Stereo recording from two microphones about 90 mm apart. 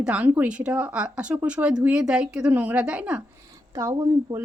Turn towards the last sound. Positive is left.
turn(degrees=-30)  # may be behind; listen again after turning